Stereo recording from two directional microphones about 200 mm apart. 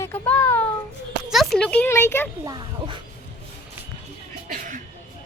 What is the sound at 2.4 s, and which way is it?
Speech, 20° right (ahead or behind).